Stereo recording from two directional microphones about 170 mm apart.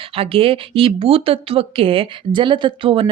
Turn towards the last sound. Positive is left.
turn(degrees=-30)  # may be behind; listen again after turning